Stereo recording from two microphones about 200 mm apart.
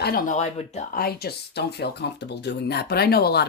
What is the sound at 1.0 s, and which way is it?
Speech, 50° left (ahead or behind).